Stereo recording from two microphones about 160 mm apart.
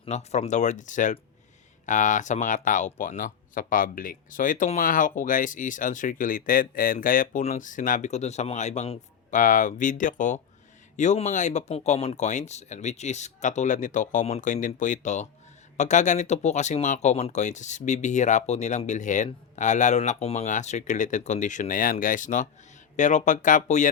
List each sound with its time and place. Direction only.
0.0 s speech: 45° left (ahead or behind)
9.3 s speech: 55° left (ahead or behind)